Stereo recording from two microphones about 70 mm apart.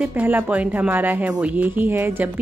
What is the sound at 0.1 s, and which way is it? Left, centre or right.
Speech, right.